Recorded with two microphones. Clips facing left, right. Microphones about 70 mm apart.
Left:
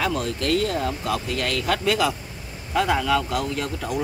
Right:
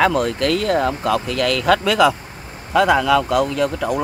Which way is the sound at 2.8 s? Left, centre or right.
Right.